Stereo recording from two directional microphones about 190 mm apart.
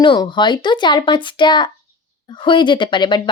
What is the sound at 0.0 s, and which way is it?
Speech, 25° left (ahead or behind).